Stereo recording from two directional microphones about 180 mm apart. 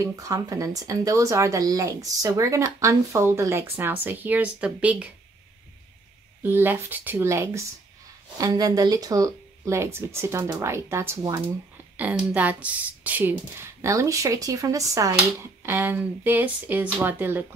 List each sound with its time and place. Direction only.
0.0 s a woman's voice: 20° right (ahead or behind)
6.4 s a woman's voice: 10° right (ahead or behind)